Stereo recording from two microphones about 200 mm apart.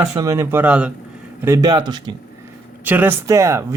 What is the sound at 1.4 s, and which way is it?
Speech, 15° right (ahead or behind).